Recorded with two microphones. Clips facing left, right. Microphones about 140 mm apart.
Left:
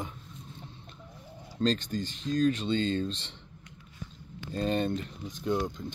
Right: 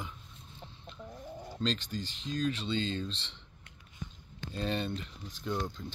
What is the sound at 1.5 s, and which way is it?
Speech, 45° left (ahead or behind).